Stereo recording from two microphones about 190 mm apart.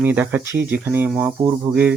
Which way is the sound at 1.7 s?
20° right (ahead or behind).